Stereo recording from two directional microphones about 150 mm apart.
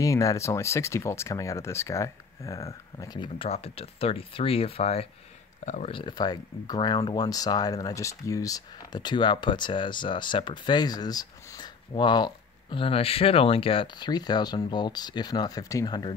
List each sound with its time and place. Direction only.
0.0 s speech: 20° left (ahead or behind)
3.4 s speech: 45° left (ahead or behind); by 16.2 s 30° left (ahead or behind)